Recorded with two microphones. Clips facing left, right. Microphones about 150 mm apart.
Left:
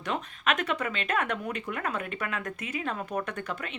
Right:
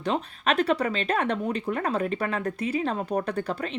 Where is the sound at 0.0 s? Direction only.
30° right (ahead or behind).